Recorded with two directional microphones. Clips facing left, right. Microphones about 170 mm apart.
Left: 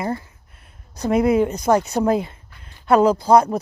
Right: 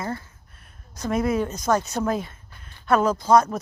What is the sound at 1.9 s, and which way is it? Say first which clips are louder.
Speech: left 6 dB; 35° left (ahead or behind).